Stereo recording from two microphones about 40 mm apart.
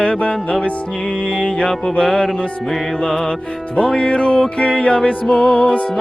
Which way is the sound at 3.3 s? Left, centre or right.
Left.